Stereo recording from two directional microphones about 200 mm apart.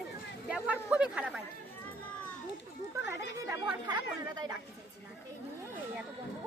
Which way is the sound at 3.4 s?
20° right (ahead or behind).